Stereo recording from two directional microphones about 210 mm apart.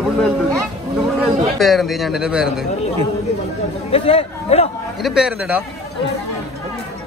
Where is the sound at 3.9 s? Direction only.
25° left (ahead or behind).